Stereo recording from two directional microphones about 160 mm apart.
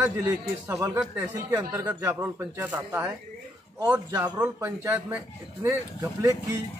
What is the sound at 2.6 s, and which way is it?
Speech, 15° right (ahead or behind).